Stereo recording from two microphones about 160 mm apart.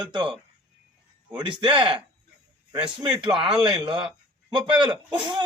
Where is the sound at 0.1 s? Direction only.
30° right (ahead or behind).